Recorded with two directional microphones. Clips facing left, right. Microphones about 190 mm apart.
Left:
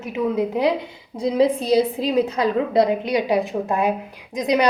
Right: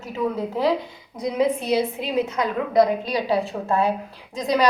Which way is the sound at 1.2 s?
30° left (ahead or behind).